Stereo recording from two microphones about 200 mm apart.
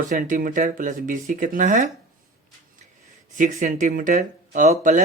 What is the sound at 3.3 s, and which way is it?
Speech, 40° right (ahead or behind).